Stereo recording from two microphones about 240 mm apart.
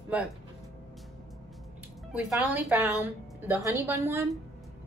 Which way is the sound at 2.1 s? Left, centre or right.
Centre.